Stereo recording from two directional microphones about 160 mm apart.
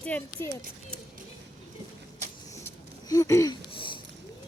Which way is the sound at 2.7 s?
20° left (ahead or behind).